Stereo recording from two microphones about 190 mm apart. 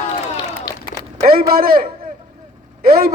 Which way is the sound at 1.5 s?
50° right (ahead or behind).